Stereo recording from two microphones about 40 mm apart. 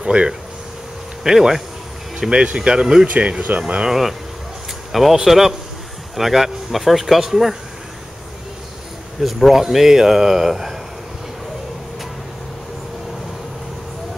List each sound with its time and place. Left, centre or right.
0.0 s speech: right
1.2 s speech: centre
3.1 s speech: right
3.6 s speech: centre
4.9 s speech: centre
9.2 s speech: centre